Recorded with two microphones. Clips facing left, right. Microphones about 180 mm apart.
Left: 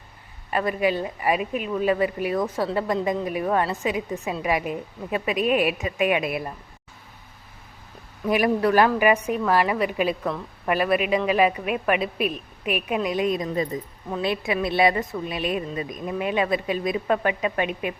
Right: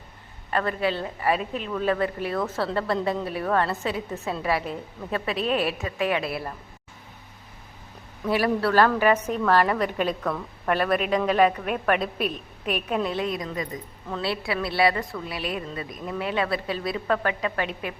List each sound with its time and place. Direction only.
0.5 s a woman's voice: 10° left (ahead or behind)
8.3 s a woman's voice: 15° left (ahead or behind)